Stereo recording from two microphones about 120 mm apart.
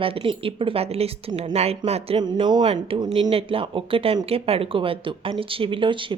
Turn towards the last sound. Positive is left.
turn(degrees=-45)  # may be behind; listen again after turning